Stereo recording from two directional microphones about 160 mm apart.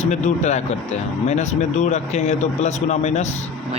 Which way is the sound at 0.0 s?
45° left (ahead or behind).